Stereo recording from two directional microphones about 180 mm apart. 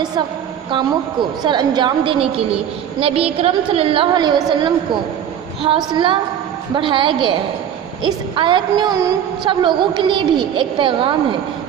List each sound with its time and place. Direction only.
0.0 s a sound: 20° right (ahead or behind)
0.7 s a woman's voice: 25° right (ahead or behind)
5.6 s a woman's voice: 25° right (ahead or behind)